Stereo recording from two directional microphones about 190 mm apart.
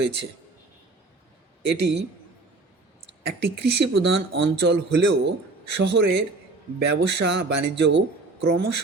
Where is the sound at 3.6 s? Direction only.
65° right (ahead or behind).